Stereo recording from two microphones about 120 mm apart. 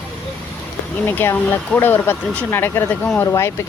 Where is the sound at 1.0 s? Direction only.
15° left (ahead or behind).